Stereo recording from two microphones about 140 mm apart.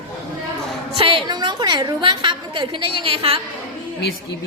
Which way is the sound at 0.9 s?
40° right (ahead or behind).